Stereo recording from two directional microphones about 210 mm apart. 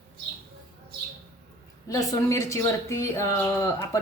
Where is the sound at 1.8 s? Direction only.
15° left (ahead or behind).